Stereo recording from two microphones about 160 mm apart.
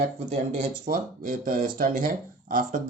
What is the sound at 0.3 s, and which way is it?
Speech, 50° right (ahead or behind).